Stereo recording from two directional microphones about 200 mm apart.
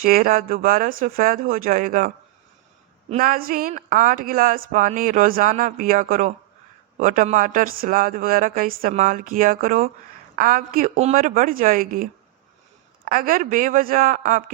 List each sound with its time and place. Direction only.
0.0 s speech: 45° right (ahead or behind)
13.1 s speech: 45° right (ahead or behind)